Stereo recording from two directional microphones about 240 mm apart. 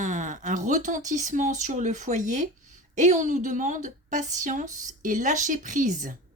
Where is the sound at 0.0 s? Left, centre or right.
Right.